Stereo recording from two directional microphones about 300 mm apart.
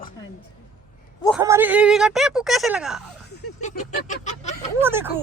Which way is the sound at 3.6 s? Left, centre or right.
Left.